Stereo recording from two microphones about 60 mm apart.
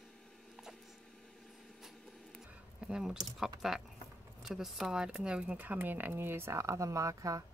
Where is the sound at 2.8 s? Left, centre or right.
Centre.